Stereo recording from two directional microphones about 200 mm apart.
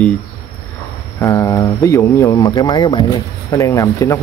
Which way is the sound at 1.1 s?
15° left (ahead or behind).